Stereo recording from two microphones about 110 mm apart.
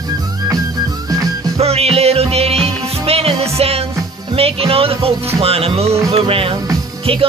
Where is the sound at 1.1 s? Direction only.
35° right (ahead or behind).